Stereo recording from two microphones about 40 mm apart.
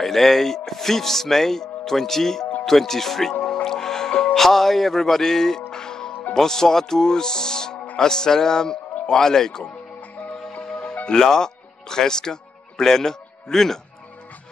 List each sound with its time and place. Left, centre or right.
0.0 s speech: centre
3.6 s music: centre
6.3 s speech: centre
10.5 s music: left
11.1 s speech: centre